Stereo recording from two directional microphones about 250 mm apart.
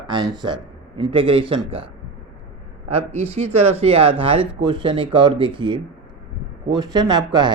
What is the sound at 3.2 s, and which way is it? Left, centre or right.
Speech, right.